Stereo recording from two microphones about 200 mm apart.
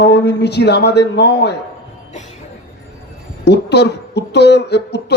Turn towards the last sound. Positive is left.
turn(degrees=60)  # may be behind; listen again after turning